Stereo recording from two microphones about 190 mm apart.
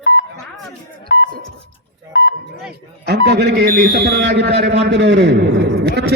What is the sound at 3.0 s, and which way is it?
A man's voice, 60° right (ahead or behind).